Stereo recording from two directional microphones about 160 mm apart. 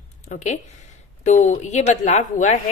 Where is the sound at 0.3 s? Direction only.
50° left (ahead or behind).